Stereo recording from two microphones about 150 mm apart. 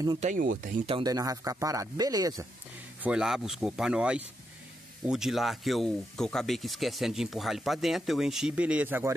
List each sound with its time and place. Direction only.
0.2 s speech: 60° right (ahead or behind)
1.0 s speech: 25° right (ahead or behind)
3.0 s speech: 5° right (ahead or behind)